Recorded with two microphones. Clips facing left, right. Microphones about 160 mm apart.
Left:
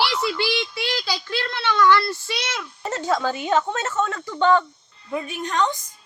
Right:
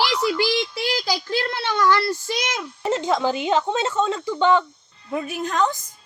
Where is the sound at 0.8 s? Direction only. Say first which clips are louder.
Right 3 dB; 40° right (ahead or behind).